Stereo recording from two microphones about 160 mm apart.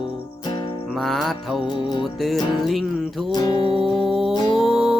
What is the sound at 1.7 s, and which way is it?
Music, 30° left (ahead or behind).